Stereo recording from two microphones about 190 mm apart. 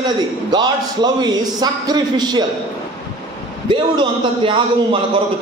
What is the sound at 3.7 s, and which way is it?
A man's voice, 25° right (ahead or behind).